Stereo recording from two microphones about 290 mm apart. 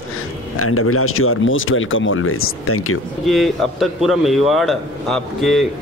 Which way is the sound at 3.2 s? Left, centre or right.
Centre.